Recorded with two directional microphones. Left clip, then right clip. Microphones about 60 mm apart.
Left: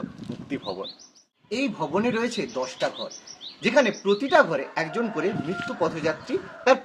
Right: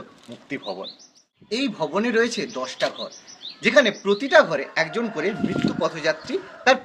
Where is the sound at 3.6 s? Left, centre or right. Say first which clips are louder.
Right 4 dB; left.